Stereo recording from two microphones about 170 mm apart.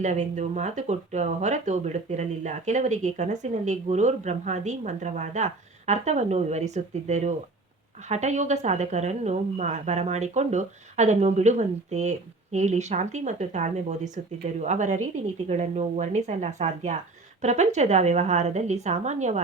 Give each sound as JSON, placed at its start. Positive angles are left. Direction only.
{"t": 0.0, "sound": "speech", "side_deg": -45}